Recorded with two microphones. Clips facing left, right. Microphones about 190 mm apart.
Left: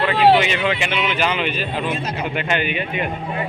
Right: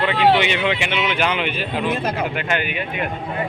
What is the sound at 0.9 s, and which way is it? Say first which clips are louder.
Speech: even; 10° right (ahead or behind).